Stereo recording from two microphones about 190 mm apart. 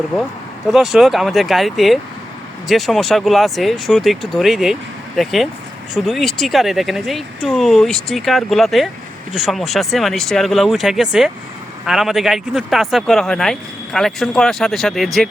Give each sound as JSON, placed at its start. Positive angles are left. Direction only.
{"t": 0.7, "sound": "speech", "side_deg": 0}